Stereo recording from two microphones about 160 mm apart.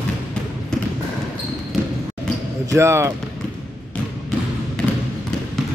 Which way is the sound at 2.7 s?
15° right (ahead or behind).